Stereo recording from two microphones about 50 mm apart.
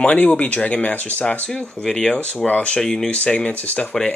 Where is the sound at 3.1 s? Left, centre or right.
Left.